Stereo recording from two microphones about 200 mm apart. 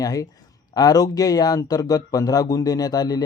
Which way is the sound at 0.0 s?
20° left (ahead or behind).